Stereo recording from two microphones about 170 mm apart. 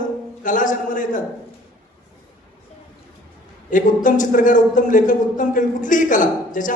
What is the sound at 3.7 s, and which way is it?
A man's voice, 50° left (ahead or behind).